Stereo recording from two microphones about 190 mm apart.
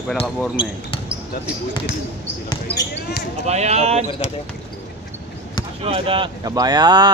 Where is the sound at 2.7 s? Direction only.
30° left (ahead or behind).